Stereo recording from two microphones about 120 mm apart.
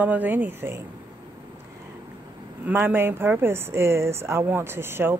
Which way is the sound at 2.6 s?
15° right (ahead or behind).